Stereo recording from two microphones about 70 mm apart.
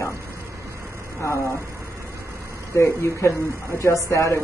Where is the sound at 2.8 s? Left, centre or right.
Left.